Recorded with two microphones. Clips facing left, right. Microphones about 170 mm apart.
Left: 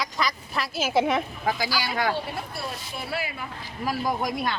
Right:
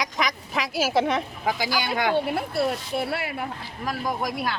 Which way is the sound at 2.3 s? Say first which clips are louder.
Right 9 dB; 65° right (ahead or behind).